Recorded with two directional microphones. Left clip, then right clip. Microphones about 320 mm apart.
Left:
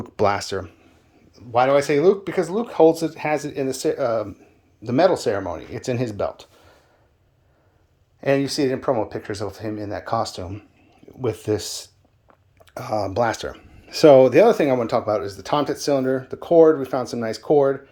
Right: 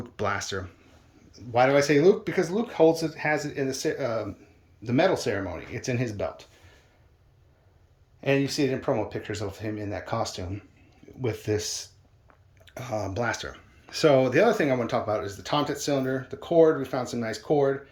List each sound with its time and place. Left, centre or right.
0.0 s speech: centre
8.2 s speech: centre